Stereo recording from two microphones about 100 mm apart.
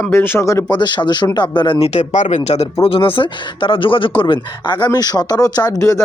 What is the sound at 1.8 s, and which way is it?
Speech, 90° left.